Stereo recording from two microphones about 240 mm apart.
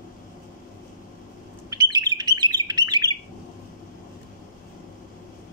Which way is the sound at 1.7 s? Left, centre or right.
Centre.